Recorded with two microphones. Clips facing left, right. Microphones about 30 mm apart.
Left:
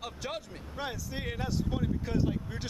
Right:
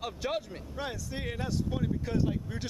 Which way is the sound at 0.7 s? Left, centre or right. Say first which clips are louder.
Even; centre.